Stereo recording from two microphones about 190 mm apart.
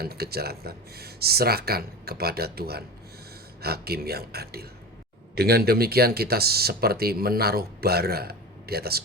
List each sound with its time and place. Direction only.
0.0 s speech: 55° right (ahead or behind)